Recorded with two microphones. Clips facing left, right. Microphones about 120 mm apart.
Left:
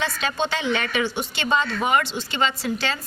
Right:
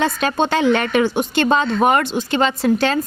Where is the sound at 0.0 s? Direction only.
50° right (ahead or behind).